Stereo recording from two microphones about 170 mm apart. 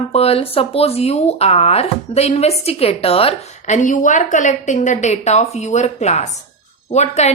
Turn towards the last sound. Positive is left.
turn(degrees=40)  # may be behind; listen again after turning